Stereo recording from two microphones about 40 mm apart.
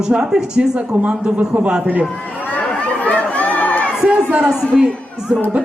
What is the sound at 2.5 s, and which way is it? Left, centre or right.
Chatter, left.